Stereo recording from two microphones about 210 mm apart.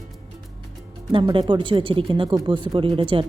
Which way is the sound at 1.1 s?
25° right (ahead or behind).